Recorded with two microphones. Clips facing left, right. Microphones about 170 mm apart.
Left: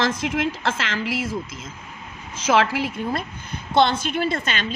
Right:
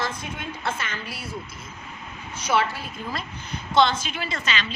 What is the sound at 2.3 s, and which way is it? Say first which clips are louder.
Speech: left 5 dB; 90° left.